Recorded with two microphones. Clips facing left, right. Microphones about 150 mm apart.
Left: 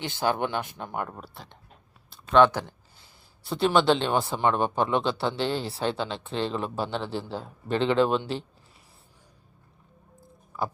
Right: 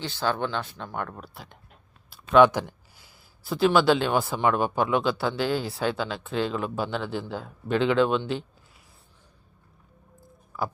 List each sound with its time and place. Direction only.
0.0 s a man's voice: 20° left (ahead or behind); by 1.5 s centre (ahead or behind)
2.0 s a sound: 10° right (ahead or behind)
3.4 s a man's voice: centre (ahead or behind)